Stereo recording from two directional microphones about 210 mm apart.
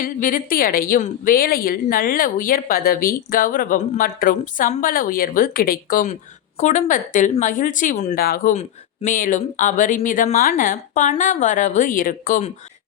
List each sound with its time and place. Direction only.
0.0 s a woman's voice: 40° left (ahead or behind)